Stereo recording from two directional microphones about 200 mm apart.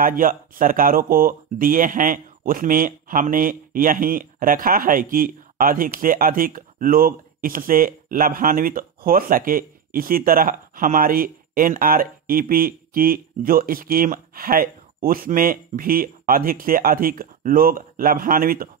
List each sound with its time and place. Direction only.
0.0 s speech: 45° right (ahead or behind)